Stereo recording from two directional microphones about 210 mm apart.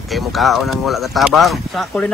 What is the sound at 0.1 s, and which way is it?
Speech, centre (ahead or behind).